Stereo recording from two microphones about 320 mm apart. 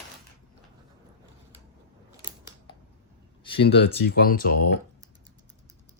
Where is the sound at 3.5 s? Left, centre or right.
Left.